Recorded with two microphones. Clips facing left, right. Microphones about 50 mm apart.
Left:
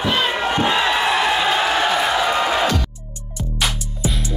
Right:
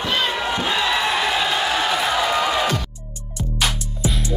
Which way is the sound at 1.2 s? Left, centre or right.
Left.